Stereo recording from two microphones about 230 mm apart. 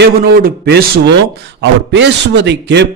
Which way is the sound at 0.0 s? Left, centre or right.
Right.